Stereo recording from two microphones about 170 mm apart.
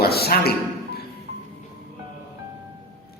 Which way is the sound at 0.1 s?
65° left (ahead or behind).